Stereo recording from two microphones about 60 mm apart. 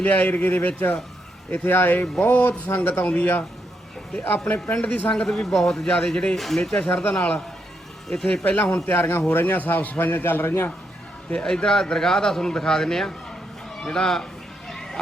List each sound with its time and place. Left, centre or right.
0.0 s a man's voice: left
4.7 s speech: left
5.1 s a man's voice: centre
6.8 s speech: left
7.2 s speech: centre
8.4 s speech: left
8.9 s a man's voice: left
11.3 s a man's voice: centre
14.7 s a sound: centre